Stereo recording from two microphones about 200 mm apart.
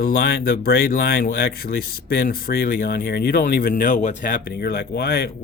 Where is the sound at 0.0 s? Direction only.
50° left (ahead or behind).